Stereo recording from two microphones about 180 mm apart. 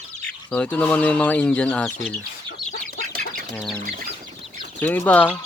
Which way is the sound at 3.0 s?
50° right (ahead or behind).